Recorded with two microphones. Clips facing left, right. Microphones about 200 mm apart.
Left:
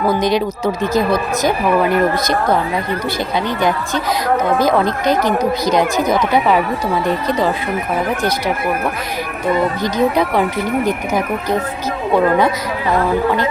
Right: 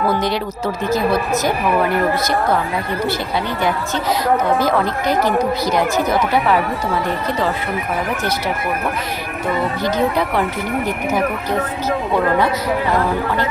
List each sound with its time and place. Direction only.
0.0 s speech: 15° left (ahead or behind)
4.5 s speech: 15° left (ahead or behind)
9.8 s speech: 15° left (ahead or behind)